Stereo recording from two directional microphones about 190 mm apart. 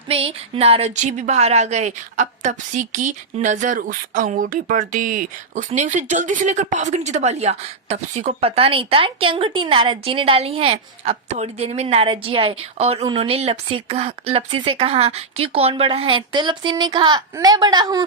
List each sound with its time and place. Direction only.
0.1 s speech: 30° right (ahead or behind)